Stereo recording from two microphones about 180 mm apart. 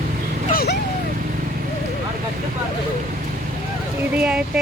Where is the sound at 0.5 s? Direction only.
60° left (ahead or behind).